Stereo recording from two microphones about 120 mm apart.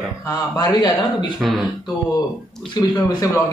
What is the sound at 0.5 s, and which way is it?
Speech, 30° left (ahead or behind).